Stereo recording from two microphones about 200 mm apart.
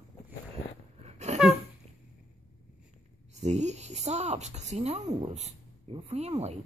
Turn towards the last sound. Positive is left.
turn(degrees=-35)  # may be behind; listen again after turning